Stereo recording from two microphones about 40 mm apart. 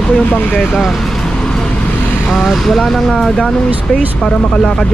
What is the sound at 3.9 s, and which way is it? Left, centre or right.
Speech, left.